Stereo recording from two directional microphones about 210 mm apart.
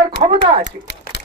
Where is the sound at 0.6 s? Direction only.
60° left (ahead or behind).